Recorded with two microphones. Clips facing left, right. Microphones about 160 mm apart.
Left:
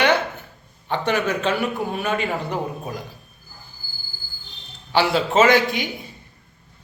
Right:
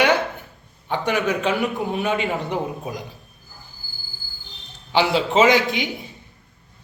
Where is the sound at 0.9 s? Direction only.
10° right (ahead or behind).